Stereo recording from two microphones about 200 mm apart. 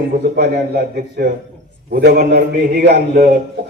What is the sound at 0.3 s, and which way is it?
A man's voice, 50° right (ahead or behind).